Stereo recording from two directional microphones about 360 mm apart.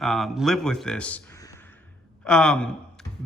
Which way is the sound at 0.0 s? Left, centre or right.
Centre.